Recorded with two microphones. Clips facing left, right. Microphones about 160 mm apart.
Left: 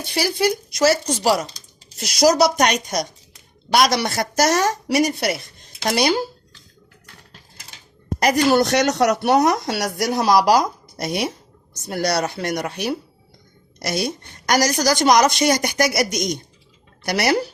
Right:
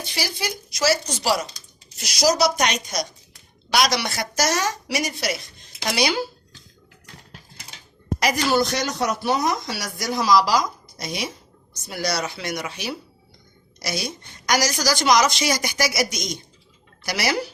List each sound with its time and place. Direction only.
0.1 s a woman's voice: 50° left (ahead or behind)
8.5 s a woman's voice: 70° left (ahead or behind); by 17.4 s 55° left (ahead or behind)